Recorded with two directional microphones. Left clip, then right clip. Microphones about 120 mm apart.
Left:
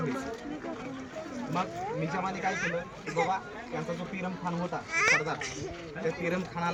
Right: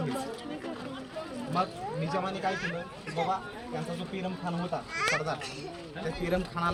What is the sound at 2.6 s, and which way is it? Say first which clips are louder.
Speech: left 3 dB; 55° left (ahead or behind).